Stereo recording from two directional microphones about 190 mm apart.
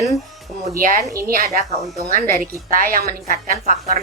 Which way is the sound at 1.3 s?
45° right (ahead or behind).